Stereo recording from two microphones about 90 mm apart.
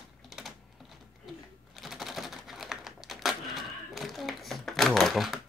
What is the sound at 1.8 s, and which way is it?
Typing, centre (ahead or behind).